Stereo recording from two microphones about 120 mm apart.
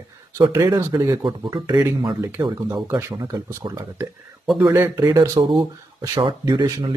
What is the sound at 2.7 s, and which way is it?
Speech, 20° right (ahead or behind).